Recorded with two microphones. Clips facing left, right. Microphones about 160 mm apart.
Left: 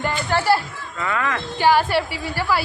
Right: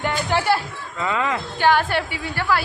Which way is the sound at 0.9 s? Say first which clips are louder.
Right 1 dB; 20° right (ahead or behind).